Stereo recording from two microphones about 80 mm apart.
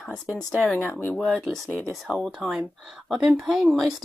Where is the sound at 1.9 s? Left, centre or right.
Centre.